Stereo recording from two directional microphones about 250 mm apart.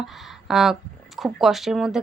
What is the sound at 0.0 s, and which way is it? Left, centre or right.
Speech, centre.